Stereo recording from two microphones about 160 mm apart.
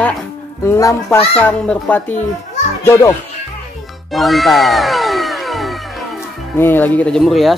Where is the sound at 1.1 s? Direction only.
35° left (ahead or behind).